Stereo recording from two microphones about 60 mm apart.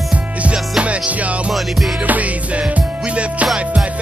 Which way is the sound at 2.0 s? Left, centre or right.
Right.